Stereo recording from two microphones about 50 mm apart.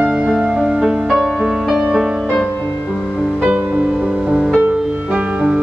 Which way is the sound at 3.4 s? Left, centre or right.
Right.